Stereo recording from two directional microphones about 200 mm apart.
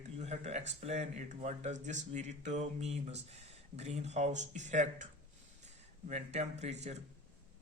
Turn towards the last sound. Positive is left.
turn(degrees=-35)  # may be behind; listen again after turning